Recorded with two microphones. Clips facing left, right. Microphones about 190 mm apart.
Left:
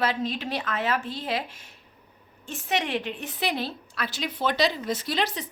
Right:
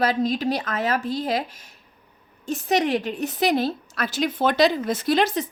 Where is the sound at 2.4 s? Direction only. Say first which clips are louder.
Right 7 dB; 40° right (ahead or behind).